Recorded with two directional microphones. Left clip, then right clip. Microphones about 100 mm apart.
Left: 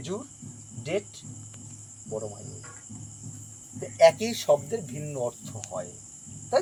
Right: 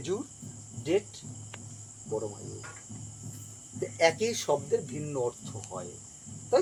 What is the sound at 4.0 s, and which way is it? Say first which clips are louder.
Speech: left 6 dB; 20° right (ahead or behind).